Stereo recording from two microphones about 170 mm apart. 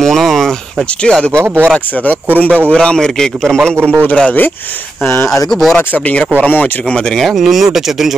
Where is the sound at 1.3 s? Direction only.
10° right (ahead or behind).